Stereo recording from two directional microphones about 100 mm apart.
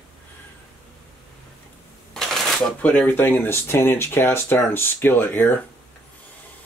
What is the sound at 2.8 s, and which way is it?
Speech, 15° left (ahead or behind).